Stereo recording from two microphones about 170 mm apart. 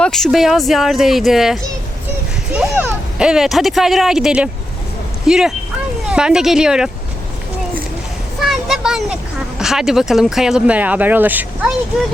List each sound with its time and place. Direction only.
0.0 s speech: centre (ahead or behind)
8.4 s a sound: centre (ahead or behind)
9.6 s speech: centre (ahead or behind)